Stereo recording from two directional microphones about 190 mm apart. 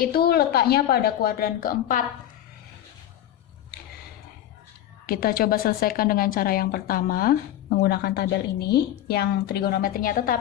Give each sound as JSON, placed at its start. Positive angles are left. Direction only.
{"t": 0.0, "sound": "speech", "side_deg": 55}
{"t": 5.0, "sound": "a woman's voice", "side_deg": 50}